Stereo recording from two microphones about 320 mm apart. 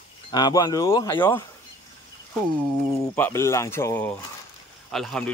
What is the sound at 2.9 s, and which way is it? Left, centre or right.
Speech, centre.